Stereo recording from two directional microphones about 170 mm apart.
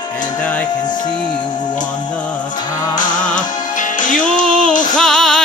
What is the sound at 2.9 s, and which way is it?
Music, 50° left (ahead or behind).